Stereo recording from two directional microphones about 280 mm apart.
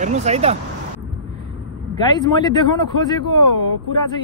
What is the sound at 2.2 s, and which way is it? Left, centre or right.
Speech, centre.